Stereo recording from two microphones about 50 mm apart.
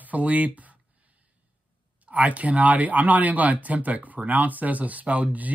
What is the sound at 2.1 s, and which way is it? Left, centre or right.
Speech, right.